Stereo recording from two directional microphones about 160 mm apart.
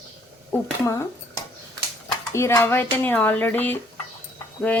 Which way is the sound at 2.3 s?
15° left (ahead or behind).